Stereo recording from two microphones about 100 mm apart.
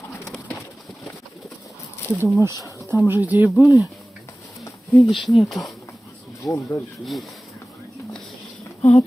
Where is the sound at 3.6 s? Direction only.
35° left (ahead or behind).